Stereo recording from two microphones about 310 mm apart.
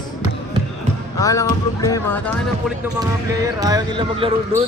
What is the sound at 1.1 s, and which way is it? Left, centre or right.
Speech, centre.